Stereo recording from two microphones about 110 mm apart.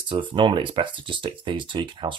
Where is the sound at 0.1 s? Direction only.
50° right (ahead or behind).